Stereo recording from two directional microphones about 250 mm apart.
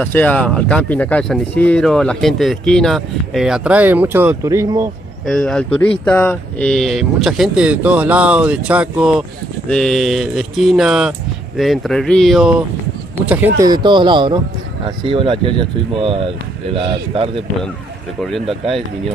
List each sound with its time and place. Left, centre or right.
0.0 s speech: centre
5.2 s speech: centre
13.6 s speech: centre
16.7 s speech: right